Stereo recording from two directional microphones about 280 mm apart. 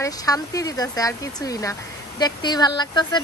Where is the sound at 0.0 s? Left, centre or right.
Centre.